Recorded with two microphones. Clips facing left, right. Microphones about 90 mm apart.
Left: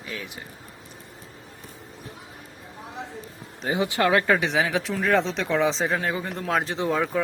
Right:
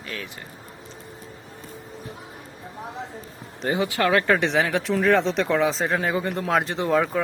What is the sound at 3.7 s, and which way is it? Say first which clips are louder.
Speech: even; 20° left (ahead or behind).